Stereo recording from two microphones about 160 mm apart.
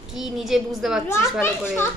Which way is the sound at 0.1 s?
Centre (ahead or behind).